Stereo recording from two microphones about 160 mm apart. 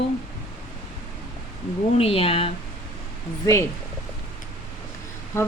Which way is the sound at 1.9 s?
40° left (ahead or behind).